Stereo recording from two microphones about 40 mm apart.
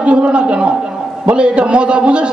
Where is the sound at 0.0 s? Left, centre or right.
Right.